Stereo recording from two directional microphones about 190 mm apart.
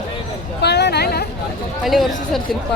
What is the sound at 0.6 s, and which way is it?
Speech, 60° left (ahead or behind).